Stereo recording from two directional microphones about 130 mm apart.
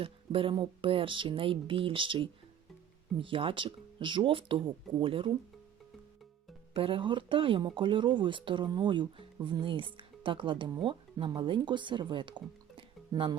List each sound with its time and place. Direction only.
0.0 s speech: 45° right (ahead or behind)
6.7 s speech: 45° right (ahead or behind)